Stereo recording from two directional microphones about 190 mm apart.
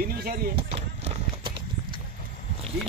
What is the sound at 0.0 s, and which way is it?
Chop, 50° right (ahead or behind).